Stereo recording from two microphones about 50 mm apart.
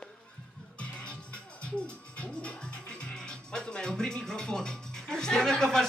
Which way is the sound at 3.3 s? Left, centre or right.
Centre.